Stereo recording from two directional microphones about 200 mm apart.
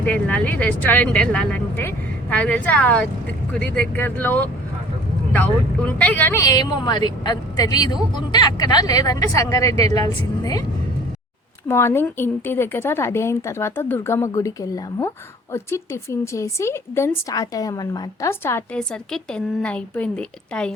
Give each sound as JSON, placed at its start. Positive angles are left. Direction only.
{"t": 0.0, "sound": "a woman's voice", "side_deg": 5}
{"t": 10.0, "sound": "a woman's voice", "side_deg": -30}
{"t": 11.7, "sound": "a woman's voice", "side_deg": 10}